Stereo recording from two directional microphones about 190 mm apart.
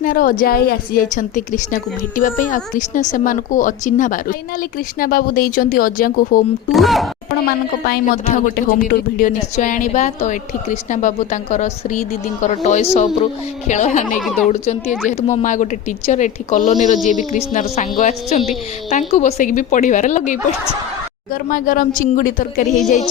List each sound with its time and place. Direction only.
0.0 s a woman's voice: 45° left (ahead or behind)
6.7 s speech: centre (ahead or behind)
7.9 s speech: 50° left (ahead or behind)
14.2 s speech: centre (ahead or behind)
14.5 s speech: 35° left (ahead or behind)
21.5 s a woman's voice: 45° left (ahead or behind)